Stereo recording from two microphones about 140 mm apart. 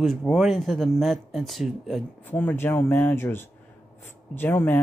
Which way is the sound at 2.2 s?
15° left (ahead or behind).